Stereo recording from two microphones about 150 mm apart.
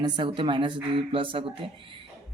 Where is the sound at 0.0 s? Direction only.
30° right (ahead or behind).